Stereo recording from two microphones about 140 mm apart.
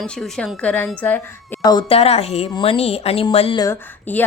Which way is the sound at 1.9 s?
45° left (ahead or behind).